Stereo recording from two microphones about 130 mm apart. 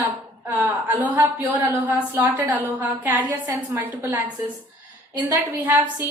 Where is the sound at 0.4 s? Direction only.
20° right (ahead or behind).